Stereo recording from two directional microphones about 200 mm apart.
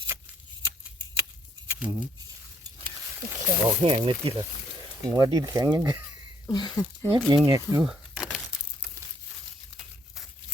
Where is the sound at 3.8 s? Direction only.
25° right (ahead or behind).